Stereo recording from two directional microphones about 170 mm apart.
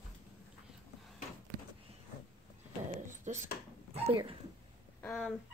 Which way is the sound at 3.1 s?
45° right (ahead or behind).